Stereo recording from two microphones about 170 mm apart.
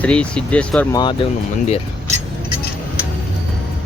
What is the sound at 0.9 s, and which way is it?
Speech, 25° left (ahead or behind).